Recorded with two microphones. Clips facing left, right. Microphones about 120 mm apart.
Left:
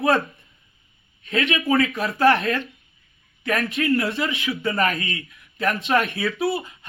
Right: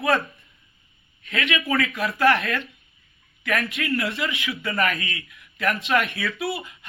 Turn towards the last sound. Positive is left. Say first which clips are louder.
# left 5 dB
turn(degrees=30)  # may be behind; listen again after turning